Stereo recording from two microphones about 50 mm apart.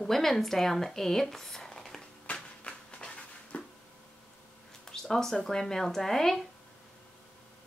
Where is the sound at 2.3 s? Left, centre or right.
Left.